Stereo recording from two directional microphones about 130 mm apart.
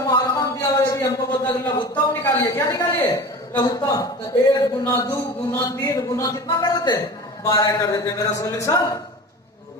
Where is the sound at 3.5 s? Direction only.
30° left (ahead or behind).